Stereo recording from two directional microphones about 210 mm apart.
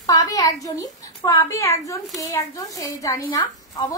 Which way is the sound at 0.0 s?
15° left (ahead or behind).